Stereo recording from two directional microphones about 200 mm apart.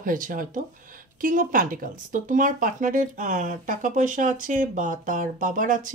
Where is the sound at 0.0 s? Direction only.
40° right (ahead or behind).